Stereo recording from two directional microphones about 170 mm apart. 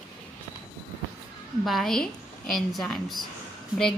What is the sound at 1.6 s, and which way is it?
A woman's voice, centre (ahead or behind).